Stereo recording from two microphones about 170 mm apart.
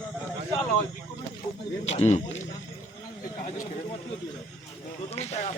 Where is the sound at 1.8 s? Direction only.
40° left (ahead or behind).